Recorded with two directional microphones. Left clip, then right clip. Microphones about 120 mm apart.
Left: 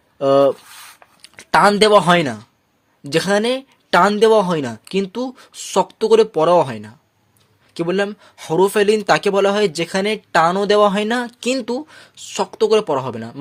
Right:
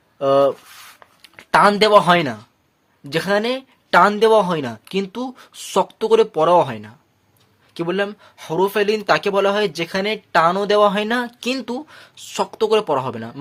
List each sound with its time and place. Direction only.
0.2 s speech: 35° left (ahead or behind)
1.2 s a sound: 40° left (ahead or behind)
1.7 s speech: 35° left (ahead or behind)
4.1 s speech: 30° left (ahead or behind)
8.4 s speech: 45° left (ahead or behind); by 13.4 s 15° left (ahead or behind)